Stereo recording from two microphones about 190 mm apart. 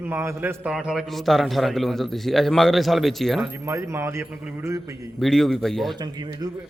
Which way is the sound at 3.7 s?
15° right (ahead or behind).